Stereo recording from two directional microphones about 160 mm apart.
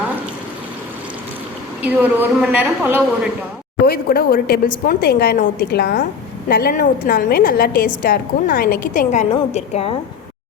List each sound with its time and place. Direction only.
1.8 s a woman's voice: 10° right (ahead or behind)
3.8 s a woman's voice: 70° left (ahead or behind)
9.3 s a woman's voice: 40° left (ahead or behind)